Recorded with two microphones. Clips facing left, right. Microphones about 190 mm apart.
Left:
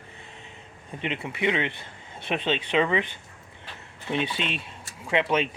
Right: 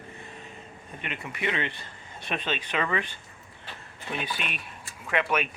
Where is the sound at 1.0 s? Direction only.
25° left (ahead or behind).